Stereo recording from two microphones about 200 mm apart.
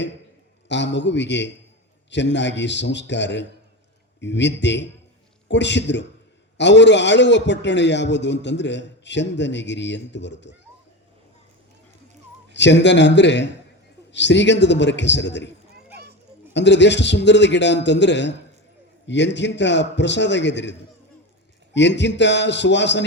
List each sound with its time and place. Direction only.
0.7 s a man's voice: 60° left (ahead or behind)
12.5 s a man's voice: 60° left (ahead or behind)
16.6 s a man's voice: 60° left (ahead or behind)